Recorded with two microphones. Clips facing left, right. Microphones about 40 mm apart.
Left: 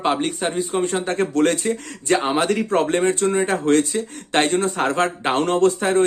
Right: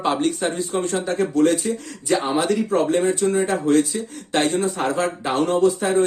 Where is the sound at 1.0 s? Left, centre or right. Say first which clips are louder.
Even; left.